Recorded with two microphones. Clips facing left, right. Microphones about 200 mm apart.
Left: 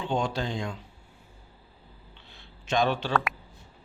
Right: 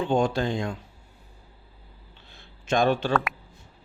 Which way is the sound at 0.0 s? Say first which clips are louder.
Right 5 dB; 50° right (ahead or behind).